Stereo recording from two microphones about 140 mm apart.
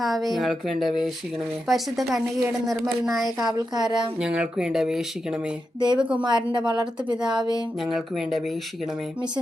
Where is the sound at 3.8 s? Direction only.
30° right (ahead or behind).